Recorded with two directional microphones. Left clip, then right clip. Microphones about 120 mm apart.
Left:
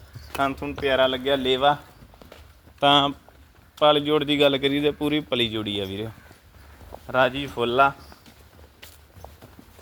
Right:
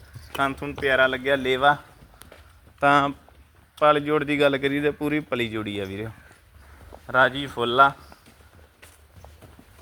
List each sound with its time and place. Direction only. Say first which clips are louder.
0.3 s speech: even; 20° right (ahead or behind)
2.8 s speech: left 1 dB; 5° left (ahead or behind)
3.8 s speech: left 1 dB; 5° right (ahead or behind)